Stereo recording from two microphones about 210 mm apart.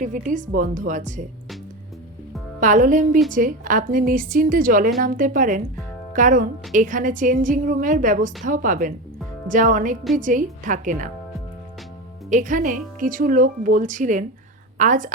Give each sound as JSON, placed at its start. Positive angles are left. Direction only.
{"t": 0.0, "sound": "speech", "side_deg": -40}
{"t": 2.6, "sound": "speech", "side_deg": -35}
{"t": 12.3, "sound": "speech", "side_deg": -35}